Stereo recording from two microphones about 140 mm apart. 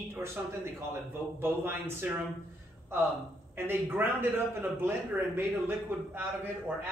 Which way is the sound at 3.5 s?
15° right (ahead or behind).